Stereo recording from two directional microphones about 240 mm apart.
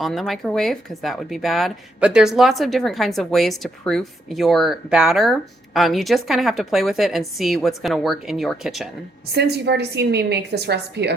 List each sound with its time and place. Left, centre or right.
0.0 s speech: centre
9.3 s a woman's voice: right